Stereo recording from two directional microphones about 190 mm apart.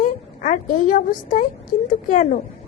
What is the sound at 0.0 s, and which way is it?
A woman's voice, 45° left (ahead or behind).